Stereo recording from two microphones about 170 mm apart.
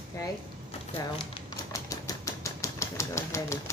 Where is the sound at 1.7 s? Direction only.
20° left (ahead or behind).